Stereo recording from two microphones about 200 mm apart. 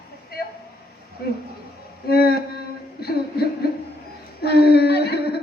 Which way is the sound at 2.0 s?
50° left (ahead or behind).